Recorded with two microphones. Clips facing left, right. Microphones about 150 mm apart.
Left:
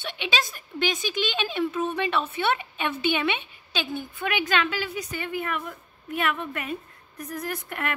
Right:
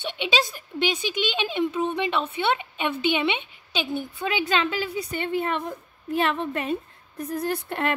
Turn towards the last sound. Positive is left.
turn(degrees=-30)  # may be behind; listen again after turning